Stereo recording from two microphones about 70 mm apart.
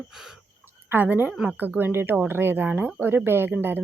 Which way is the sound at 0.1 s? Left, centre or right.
Centre.